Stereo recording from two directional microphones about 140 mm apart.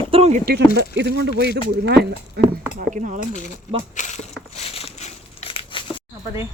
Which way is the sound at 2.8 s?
65° right (ahead or behind).